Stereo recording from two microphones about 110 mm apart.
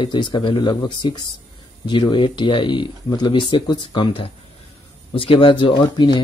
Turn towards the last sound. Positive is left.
turn(degrees=45)  # may be behind; listen again after turning